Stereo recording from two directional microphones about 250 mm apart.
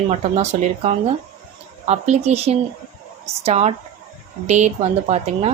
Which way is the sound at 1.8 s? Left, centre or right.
Right.